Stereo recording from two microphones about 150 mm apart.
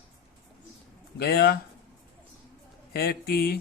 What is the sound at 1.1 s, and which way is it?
Speech, 90° left.